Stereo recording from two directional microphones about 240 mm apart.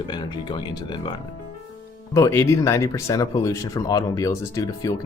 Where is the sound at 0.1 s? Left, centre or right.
Centre.